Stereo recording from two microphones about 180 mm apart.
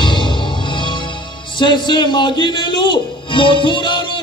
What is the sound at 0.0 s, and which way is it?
Music, 25° left (ahead or behind).